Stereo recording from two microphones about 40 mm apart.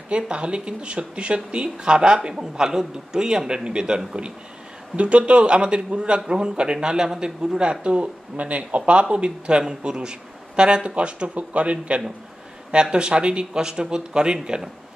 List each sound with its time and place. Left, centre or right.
0.1 s speech: right